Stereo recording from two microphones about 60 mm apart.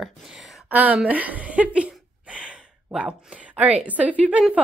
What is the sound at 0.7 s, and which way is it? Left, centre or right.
A woman's voice, right.